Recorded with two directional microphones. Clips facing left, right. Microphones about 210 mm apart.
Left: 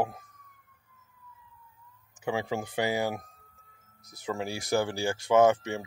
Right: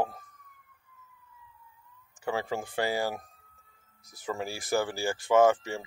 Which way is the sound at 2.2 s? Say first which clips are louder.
Left 1 dB; 15° left (ahead or behind).